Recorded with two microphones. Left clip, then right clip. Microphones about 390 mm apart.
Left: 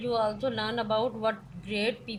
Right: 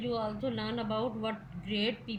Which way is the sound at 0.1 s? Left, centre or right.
Left.